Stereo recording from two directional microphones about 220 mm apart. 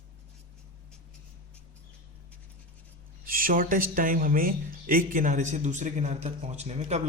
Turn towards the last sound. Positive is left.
turn(degrees=-30)  # may be behind; listen again after turning